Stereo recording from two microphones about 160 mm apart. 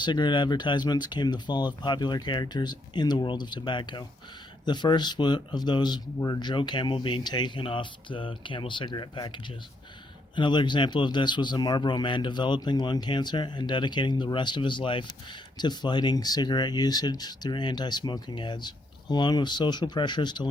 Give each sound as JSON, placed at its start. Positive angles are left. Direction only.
{"t": 0.0, "sound": "speech", "side_deg": 30}